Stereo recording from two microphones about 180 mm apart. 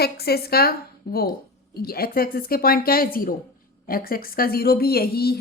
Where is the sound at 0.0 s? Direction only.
60° left (ahead or behind).